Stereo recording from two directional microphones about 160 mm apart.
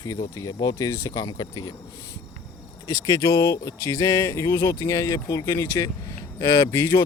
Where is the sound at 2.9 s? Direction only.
20° left (ahead or behind).